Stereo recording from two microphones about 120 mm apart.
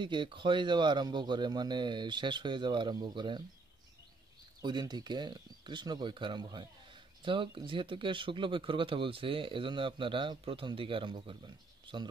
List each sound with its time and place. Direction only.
0.0 s speech: 40° right (ahead or behind)
4.6 s speech: 35° right (ahead or behind)